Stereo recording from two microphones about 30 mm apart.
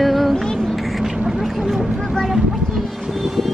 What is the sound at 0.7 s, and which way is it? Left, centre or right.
Vehicle, centre.